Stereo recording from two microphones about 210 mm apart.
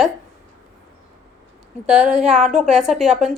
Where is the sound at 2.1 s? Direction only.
30° right (ahead or behind).